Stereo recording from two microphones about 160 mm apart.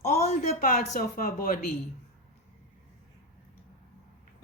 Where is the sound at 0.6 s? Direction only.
55° left (ahead or behind).